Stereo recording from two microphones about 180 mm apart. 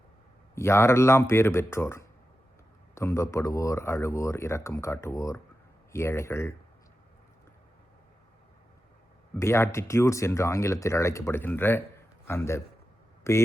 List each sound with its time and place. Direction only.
0.5 s speech: 15° left (ahead or behind)
9.3 s speech: 15° left (ahead or behind)